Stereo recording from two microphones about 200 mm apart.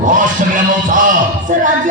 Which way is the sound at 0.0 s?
40° right (ahead or behind).